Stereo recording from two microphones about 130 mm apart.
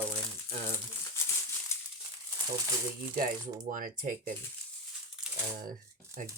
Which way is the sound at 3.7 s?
90° right.